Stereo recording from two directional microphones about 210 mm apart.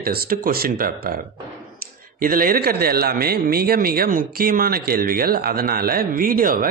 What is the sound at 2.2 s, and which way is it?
A man's voice, 45° right (ahead or behind).